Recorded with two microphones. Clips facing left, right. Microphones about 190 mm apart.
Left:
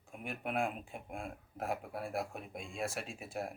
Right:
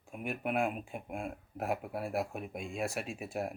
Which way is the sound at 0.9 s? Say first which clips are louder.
Right 4 dB; 55° right (ahead or behind).